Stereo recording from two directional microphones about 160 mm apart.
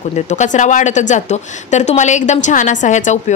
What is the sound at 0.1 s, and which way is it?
Speech, 50° left (ahead or behind).